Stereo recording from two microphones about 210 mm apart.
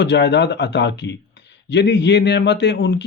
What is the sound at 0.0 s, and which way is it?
Speech, 55° left (ahead or behind).